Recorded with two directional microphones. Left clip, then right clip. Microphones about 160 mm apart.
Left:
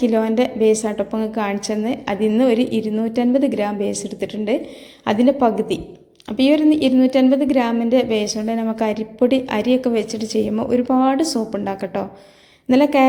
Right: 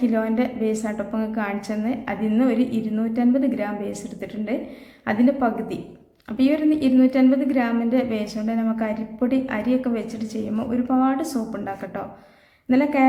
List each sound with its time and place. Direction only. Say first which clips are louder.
0.0 s a woman's voice: left 5 dB; 25° left (ahead or behind)